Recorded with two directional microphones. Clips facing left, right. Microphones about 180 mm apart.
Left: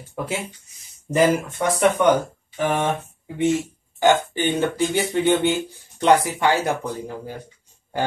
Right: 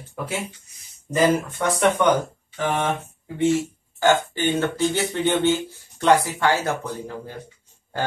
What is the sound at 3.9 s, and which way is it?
Speech, 15° left (ahead or behind).